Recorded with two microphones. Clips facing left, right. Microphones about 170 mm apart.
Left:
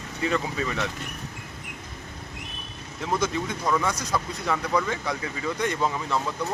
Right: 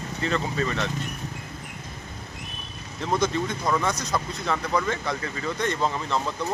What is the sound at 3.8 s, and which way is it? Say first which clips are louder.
Speech: right 1 dB; 10° left (ahead or behind).